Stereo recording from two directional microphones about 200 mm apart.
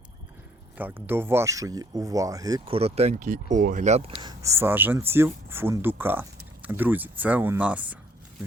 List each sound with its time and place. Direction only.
0.8 s speech: 10° right (ahead or behind); by 4.1 s 35° right (ahead or behind)
4.2 s speech: 20° right (ahead or behind)